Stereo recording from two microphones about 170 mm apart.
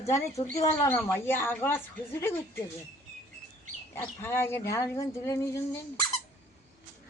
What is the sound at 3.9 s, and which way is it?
Speech, 15° left (ahead or behind).